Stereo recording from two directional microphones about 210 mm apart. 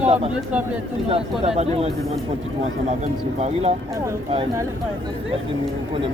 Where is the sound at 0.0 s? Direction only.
30° right (ahead or behind).